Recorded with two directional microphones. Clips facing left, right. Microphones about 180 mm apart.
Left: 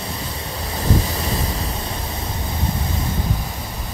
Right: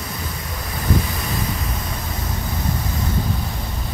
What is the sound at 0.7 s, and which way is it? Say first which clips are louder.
Wind: left 1 dB; 30° left (ahead or behind).